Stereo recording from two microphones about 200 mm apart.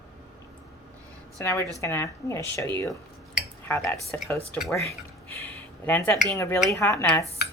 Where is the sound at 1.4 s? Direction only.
15° left (ahead or behind).